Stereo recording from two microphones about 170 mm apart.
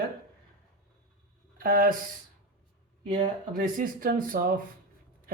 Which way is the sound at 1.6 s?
60° right (ahead or behind).